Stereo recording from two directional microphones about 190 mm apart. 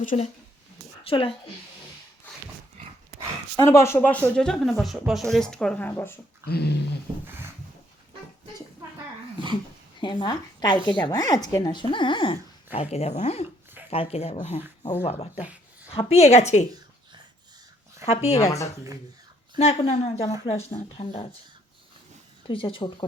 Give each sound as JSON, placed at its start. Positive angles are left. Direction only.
{"t": 0.0, "sound": "speech", "side_deg": 45}
{"t": 1.0, "sound": "speech", "side_deg": 30}
{"t": 3.1, "sound": "speech", "side_deg": 10}
{"t": 6.4, "sound": "speech", "side_deg": 60}
{"t": 7.3, "sound": "a sound", "side_deg": -10}
{"t": 10.0, "sound": "a woman's voice", "side_deg": 25}
{"t": 18.0, "sound": "a woman's voice", "side_deg": 35}
{"t": 18.3, "sound": "speech", "side_deg": 15}
{"t": 19.5, "sound": "a woman's voice", "side_deg": 30}
{"t": 22.4, "sound": "speech", "side_deg": 25}